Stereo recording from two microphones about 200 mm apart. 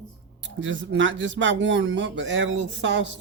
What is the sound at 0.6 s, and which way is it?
Speech, 70° right (ahead or behind).